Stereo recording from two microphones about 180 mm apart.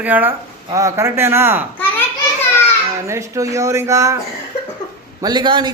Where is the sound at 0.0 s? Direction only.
10° right (ahead or behind).